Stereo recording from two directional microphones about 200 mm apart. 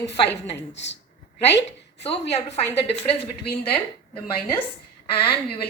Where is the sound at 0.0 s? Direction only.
60° left (ahead or behind).